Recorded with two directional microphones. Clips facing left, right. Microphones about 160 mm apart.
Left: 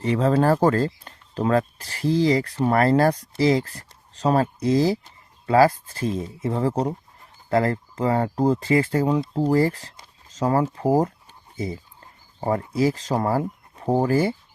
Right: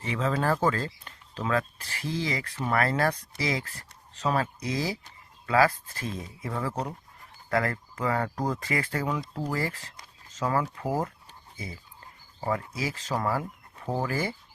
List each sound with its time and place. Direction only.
0.0 s speech: 35° left (ahead or behind)
12.4 s speech: 35° left (ahead or behind)